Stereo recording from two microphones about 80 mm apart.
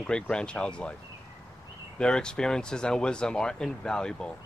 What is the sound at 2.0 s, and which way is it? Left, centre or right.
Speech, centre.